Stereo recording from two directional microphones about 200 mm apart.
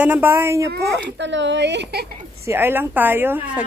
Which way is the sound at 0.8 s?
60° right (ahead or behind).